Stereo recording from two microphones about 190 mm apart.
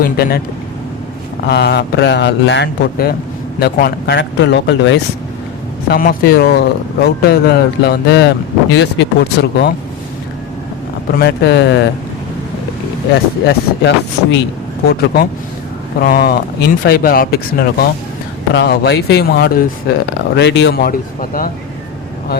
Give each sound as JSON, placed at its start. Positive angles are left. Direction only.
{"t": 0.0, "sound": "speech", "side_deg": 55}
{"t": 1.5, "sound": "speech", "side_deg": 60}
{"t": 5.9, "sound": "speech", "side_deg": 50}
{"t": 11.2, "sound": "speech", "side_deg": 60}
{"t": 13.5, "sound": "speech", "side_deg": 65}